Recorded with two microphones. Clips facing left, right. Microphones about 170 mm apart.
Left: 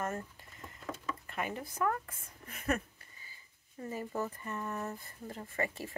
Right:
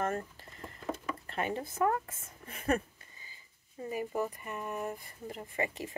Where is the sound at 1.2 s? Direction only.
30° right (ahead or behind).